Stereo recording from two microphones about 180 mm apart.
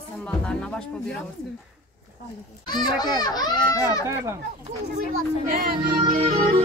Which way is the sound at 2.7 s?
25° left (ahead or behind).